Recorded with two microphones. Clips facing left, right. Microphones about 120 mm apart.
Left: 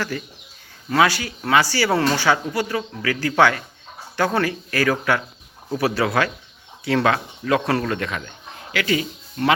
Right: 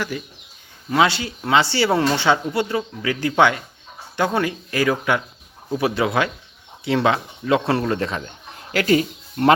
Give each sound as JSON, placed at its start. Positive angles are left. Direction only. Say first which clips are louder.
{"t": 0.1, "sound": "speech", "louder": "even", "side_deg": -15}
{"t": 8.7, "sound": "speech", "louder": "right 5 dB", "side_deg": -40}